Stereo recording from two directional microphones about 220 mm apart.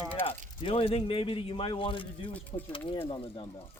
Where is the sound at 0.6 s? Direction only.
25° left (ahead or behind).